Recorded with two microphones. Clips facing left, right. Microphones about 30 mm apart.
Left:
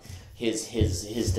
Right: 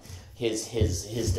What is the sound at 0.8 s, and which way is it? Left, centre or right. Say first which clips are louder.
Speech: even; left.